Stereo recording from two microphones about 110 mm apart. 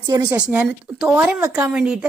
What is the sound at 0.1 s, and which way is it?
Speech, 35° right (ahead or behind).